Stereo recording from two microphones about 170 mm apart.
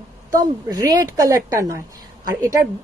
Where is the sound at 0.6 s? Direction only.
25° right (ahead or behind).